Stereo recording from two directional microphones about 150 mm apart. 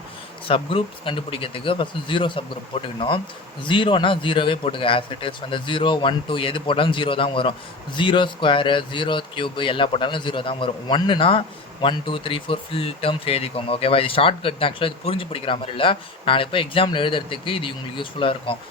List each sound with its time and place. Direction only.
0.4 s speech: 35° left (ahead or behind)